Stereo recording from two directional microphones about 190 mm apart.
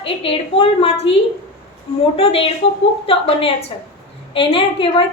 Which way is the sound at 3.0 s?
30° left (ahead or behind).